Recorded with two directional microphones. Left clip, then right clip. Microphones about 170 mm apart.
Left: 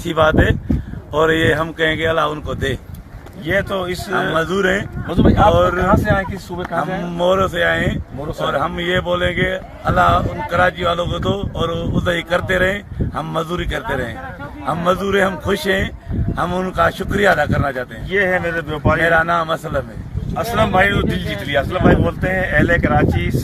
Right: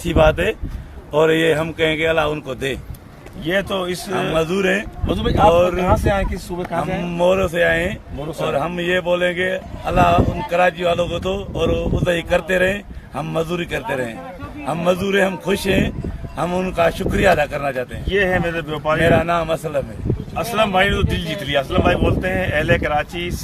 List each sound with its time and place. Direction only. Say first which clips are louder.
0.0 s speech: left 1 dB; 10° right (ahead or behind)
3.4 s speech: left 1 dB; centre (ahead or behind)
4.4 s speech: even; 15° right (ahead or behind)
5.0 s speech: left 1 dB; centre (ahead or behind)
6.8 s speech: right 1 dB; 10° right (ahead or behind)
8.2 s speech: left 1 dB; centre (ahead or behind)
8.4 s speech: left 1 dB; 10° right (ahead or behind)
18.1 s speech: left 1 dB; centre (ahead or behind)
18.9 s speech: left 1 dB; 15° right (ahead or behind)
20.3 s speech: left 2 dB; centre (ahead or behind)